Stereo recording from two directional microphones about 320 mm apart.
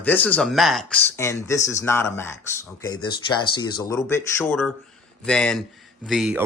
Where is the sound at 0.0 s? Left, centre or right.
Centre.